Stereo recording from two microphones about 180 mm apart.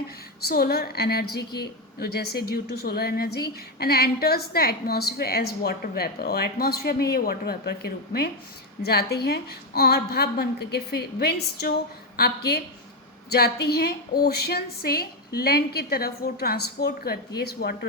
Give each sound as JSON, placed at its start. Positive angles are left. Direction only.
{"t": 0.4, "sound": "a woman's voice", "side_deg": 60}